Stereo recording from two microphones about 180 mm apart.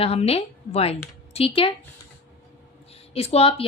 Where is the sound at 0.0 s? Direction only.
35° left (ahead or behind).